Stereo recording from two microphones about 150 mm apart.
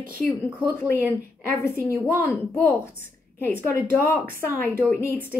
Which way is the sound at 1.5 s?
20° left (ahead or behind).